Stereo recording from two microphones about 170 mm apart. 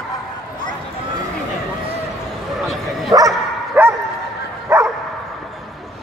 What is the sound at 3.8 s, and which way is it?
Bow-wow, 10° right (ahead or behind).